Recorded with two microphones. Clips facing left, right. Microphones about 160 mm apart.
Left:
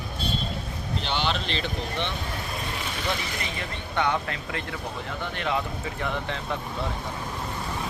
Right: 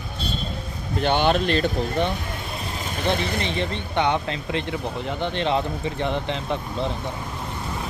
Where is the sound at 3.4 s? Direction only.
25° right (ahead or behind).